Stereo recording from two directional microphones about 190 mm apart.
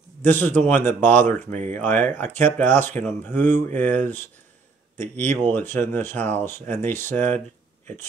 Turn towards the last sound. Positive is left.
turn(degrees=10)  # may be behind; listen again after turning